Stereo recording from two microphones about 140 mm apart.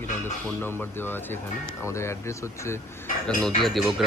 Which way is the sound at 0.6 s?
15° left (ahead or behind).